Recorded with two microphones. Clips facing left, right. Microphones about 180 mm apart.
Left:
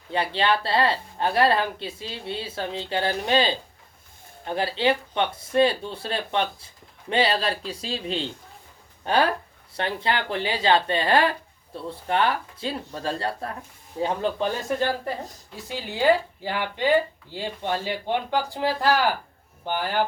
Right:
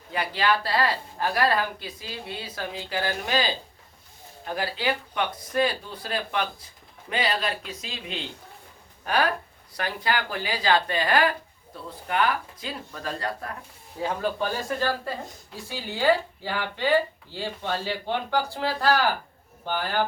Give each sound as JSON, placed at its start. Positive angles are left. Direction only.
{"t": 0.1, "sound": "a man's voice", "side_deg": 30}